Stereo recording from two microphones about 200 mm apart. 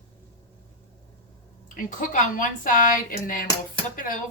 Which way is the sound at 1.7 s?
40° left (ahead or behind).